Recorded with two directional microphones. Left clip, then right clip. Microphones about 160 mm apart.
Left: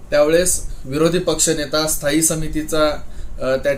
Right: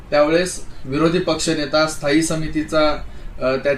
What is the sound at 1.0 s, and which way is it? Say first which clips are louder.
Speech: left 1 dB; 15° left (ahead or behind).